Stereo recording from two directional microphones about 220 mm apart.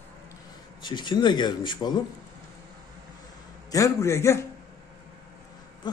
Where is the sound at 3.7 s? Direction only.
15° left (ahead or behind).